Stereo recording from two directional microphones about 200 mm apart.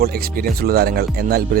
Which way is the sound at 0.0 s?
50° right (ahead or behind).